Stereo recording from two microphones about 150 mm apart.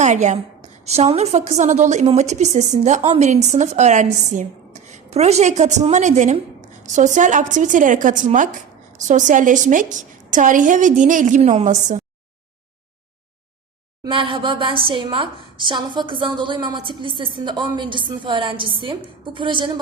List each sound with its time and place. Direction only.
0.0 s a woman's voice: 50° right (ahead or behind)
14.0 s a woman's voice: 35° right (ahead or behind)